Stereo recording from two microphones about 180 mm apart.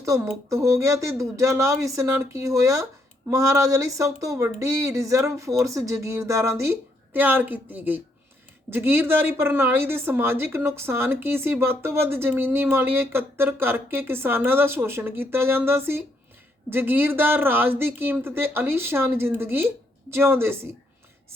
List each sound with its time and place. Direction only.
0.5 s speech: 15° right (ahead or behind)